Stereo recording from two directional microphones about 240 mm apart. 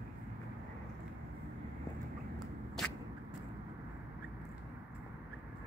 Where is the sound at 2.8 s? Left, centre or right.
Centre.